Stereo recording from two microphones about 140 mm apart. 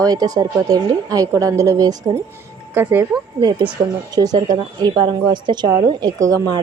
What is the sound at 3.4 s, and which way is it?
A woman's voice, 30° right (ahead or behind).